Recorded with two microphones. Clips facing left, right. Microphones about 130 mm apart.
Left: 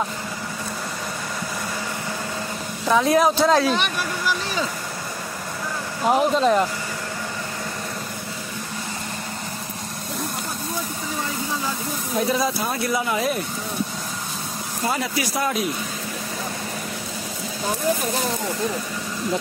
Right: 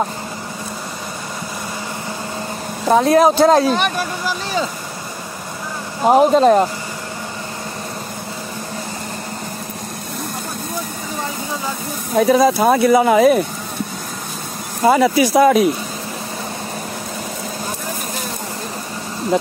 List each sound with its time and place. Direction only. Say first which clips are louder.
2.9 s speech: right 5 dB; 45° right (ahead or behind)
6.0 s speech: right 7 dB; 45° right (ahead or behind)
12.2 s speech: right 10 dB; 90° right
14.9 s speech: right 13 dB; 90° right